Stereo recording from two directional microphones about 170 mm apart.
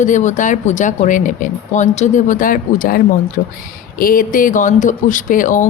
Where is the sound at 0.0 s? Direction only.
45° left (ahead or behind).